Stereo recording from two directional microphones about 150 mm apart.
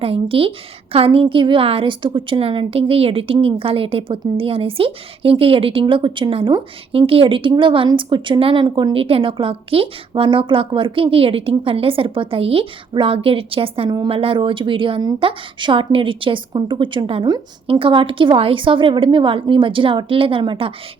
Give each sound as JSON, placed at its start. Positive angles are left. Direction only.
{"t": 0.0, "sound": "a woman's voice", "side_deg": -40}